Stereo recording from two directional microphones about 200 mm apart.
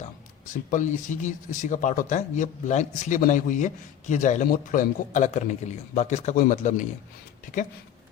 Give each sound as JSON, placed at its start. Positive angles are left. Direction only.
{"t": 0.7, "sound": "speech", "side_deg": 40}